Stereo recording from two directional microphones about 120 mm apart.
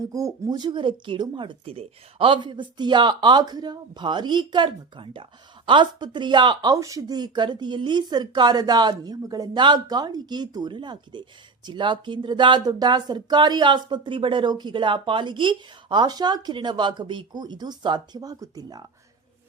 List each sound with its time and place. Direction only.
0.0 s speech: 30° right (ahead or behind)